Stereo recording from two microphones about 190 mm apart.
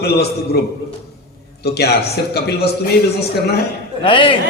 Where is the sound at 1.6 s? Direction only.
55° left (ahead or behind).